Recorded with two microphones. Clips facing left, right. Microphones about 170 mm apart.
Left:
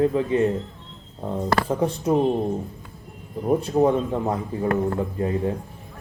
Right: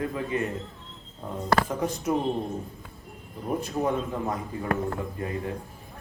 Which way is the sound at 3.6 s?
30° left (ahead or behind).